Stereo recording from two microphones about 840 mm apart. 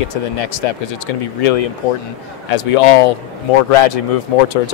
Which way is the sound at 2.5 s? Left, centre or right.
Left.